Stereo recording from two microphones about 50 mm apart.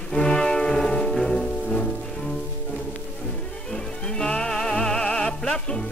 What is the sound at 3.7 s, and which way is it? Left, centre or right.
Music, centre.